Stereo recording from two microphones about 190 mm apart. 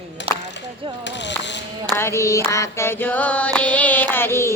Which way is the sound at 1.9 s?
15° left (ahead or behind).